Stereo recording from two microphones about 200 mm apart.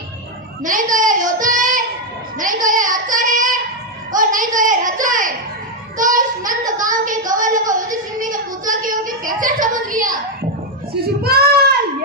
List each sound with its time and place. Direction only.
0.6 s a woman's voice: 40° right (ahead or behind)